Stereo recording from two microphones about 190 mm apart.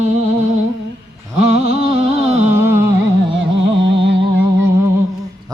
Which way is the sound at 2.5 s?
10° right (ahead or behind).